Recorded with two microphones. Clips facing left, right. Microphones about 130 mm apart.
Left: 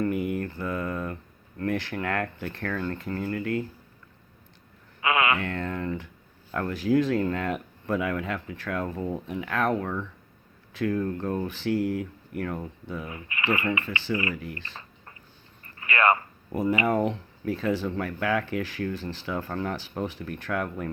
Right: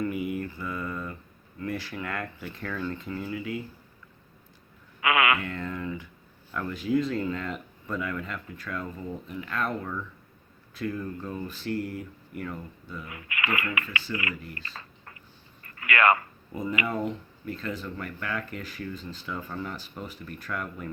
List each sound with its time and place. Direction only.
0.1 s mantra: centre (ahead or behind)
0.3 s mantra: 65° left (ahead or behind)
1.5 s speech: 70° left (ahead or behind)
4.9 s speech: 30° left (ahead or behind)
5.4 s speech: 65° left (ahead or behind)
12.4 s speech: 65° left (ahead or behind)
13.1 s speech: 30° left (ahead or behind)
14.5 s a sound: 25° left (ahead or behind)
15.8 s speech: 30° left (ahead or behind)
16.5 s speech: 70° left (ahead or behind)